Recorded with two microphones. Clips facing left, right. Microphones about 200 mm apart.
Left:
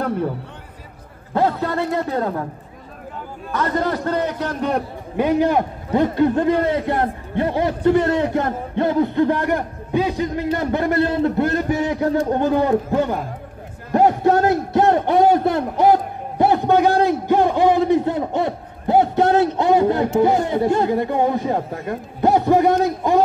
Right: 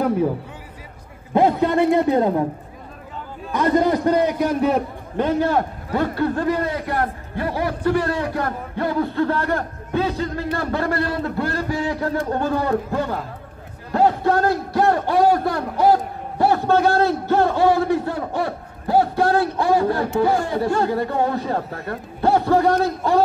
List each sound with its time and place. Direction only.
1.3 s a man's voice: 15° right (ahead or behind)
3.5 s a man's voice: 15° right (ahead or behind)
5.1 s a man's voice: 10° left (ahead or behind)